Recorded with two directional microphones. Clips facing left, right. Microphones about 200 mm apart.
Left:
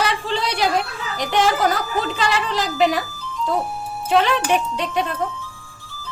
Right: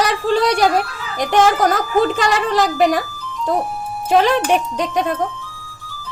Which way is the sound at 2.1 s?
50° right (ahead or behind).